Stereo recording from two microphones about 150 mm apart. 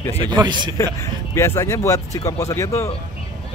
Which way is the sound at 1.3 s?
20° left (ahead or behind).